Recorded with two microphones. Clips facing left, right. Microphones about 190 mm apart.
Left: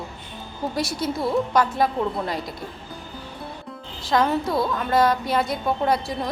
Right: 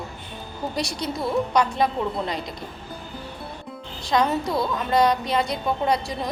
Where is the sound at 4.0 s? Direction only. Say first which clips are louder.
Left 1 dB; centre (ahead or behind).